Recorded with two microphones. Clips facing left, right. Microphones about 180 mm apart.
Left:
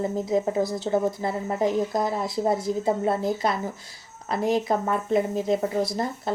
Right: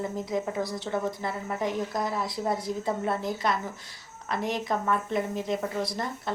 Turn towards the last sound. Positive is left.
turn(degrees=35)  # may be behind; listen again after turning